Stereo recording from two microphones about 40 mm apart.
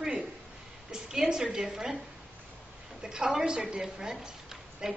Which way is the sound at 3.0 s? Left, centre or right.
Centre.